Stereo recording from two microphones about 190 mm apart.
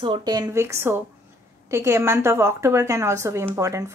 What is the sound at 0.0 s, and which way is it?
Speech, 25° right (ahead or behind).